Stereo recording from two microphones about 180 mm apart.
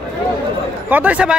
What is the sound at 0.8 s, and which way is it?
Speech, 10° right (ahead or behind).